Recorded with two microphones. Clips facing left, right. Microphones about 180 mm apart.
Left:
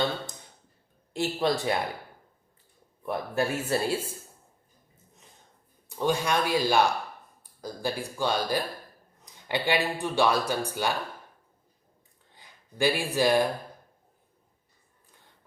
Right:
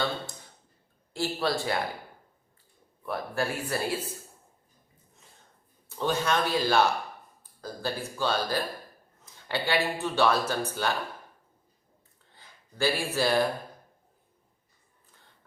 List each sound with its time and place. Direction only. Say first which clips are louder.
1.1 s speech: left 2 dB; 20° left (ahead or behind)
3.1 s speech: left 2 dB; 20° left (ahead or behind)
6.0 s speech: left 1 dB; 15° left (ahead or behind)
12.3 s speech: left 2 dB; 15° left (ahead or behind)